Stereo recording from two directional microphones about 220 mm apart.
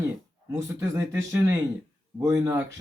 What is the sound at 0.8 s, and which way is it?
Speech, 15° right (ahead or behind).